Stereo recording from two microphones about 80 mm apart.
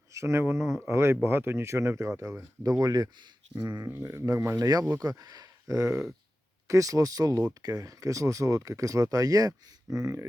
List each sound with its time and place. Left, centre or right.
0.1 s speech: right
3.8 s speech: right
4.5 s speech: right